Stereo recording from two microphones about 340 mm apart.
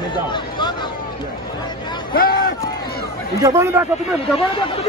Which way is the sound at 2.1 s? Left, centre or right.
Left.